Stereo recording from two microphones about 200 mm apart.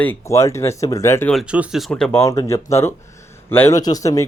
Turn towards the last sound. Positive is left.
turn(degrees=15)  # may be behind; listen again after turning